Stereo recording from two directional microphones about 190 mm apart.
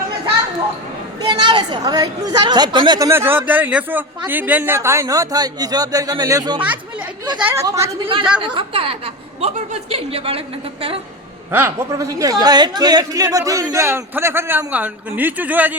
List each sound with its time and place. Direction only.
1.3 s a woman's voice: 25° right (ahead or behind)
8.0 s a woman's voice: 25° right (ahead or behind)
11.5 s a man's voice: 10° right (ahead or behind)